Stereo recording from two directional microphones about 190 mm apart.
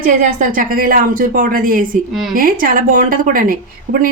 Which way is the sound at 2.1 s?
Centre (ahead or behind).